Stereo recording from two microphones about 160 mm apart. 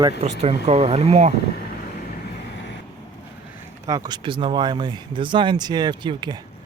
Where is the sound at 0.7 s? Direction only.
35° right (ahead or behind).